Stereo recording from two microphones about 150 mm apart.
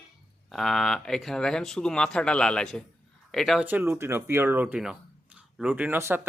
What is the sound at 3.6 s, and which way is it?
Speech, 15° right (ahead or behind).